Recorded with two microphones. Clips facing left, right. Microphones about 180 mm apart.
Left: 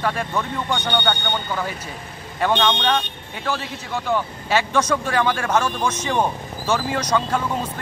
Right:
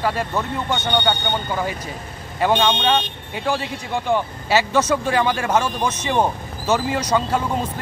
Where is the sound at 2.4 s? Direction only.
10° right (ahead or behind).